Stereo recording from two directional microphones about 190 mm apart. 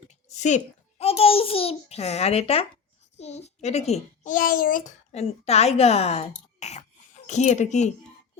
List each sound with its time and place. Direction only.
0.1 s a child's voice: 40° left (ahead or behind)